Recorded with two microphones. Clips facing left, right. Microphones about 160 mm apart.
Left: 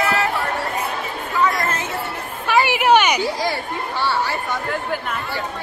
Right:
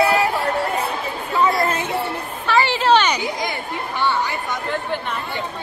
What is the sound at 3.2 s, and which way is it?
Speech, 20° right (ahead or behind).